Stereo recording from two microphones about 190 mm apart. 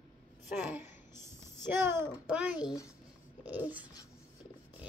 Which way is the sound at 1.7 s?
15° right (ahead or behind).